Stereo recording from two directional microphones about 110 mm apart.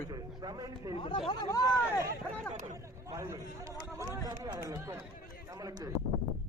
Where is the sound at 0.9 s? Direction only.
50° left (ahead or behind).